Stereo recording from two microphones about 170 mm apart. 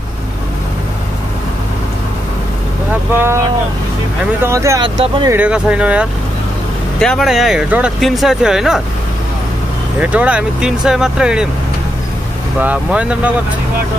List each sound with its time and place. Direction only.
3.2 s speech: 15° right (ahead or behind)
5.3 s speech: 5° right (ahead or behind)
9.9 s speech: 10° right (ahead or behind)
12.5 s speech: 10° right (ahead or behind)